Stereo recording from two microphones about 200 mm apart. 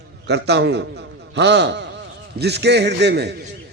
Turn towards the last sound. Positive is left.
turn(degrees=-55)  # may be behind; listen again after turning